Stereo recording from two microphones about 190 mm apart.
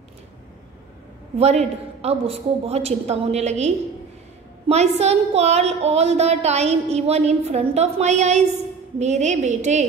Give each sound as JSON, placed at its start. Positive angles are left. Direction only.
{"t": 1.4, "sound": "a woman's voice", "side_deg": -35}